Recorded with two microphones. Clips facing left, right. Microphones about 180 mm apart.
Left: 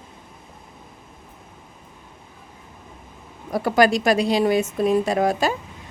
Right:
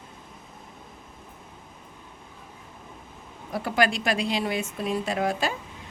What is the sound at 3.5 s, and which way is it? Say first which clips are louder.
A woman's voice: left 7 dB; 40° left (ahead or behind).